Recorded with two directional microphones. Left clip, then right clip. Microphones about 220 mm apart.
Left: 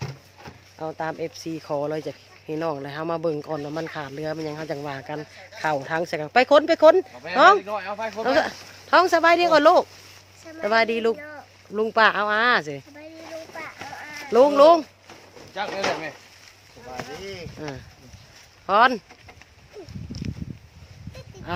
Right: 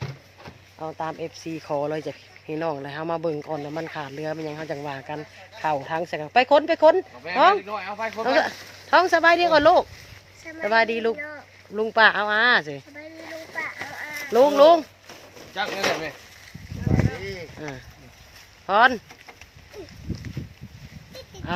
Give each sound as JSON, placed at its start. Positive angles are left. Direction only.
{"t": 0.8, "sound": "speech", "side_deg": 20}
{"t": 7.6, "sound": "speech", "side_deg": 40}
{"t": 8.2, "sound": "speech", "side_deg": 15}
{"t": 11.2, "sound": "a sound", "side_deg": -5}
{"t": 11.7, "sound": "speech", "side_deg": 15}
{"t": 13.5, "sound": "clip-clop", "side_deg": 0}
{"t": 14.3, "sound": "speech", "side_deg": 15}
{"t": 15.5, "sound": "speech", "side_deg": -35}
{"t": 17.6, "sound": "speech", "side_deg": 15}